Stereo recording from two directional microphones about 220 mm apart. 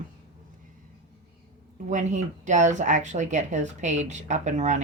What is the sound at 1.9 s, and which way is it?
Speech, 35° right (ahead or behind).